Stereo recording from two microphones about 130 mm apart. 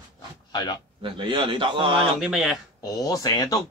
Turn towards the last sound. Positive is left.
turn(degrees=30)  # may be behind; listen again after turning